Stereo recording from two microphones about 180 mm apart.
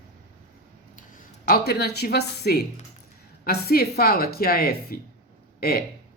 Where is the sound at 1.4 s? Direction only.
55° left (ahead or behind).